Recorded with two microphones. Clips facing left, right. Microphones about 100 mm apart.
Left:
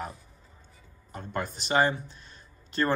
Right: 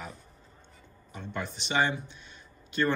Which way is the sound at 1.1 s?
45° left (ahead or behind).